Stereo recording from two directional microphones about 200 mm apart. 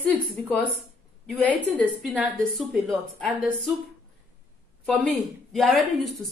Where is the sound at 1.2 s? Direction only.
Centre (ahead or behind).